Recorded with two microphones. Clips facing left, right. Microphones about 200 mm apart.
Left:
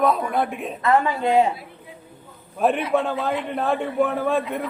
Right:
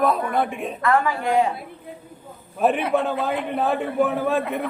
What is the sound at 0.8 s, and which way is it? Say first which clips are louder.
Speech: left 1 dB; 25° left (ahead or behind).